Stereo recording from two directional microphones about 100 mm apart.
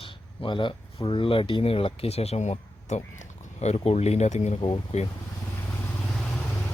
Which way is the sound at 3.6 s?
90° left.